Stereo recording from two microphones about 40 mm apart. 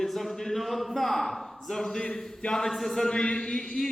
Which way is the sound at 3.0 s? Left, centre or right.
Left.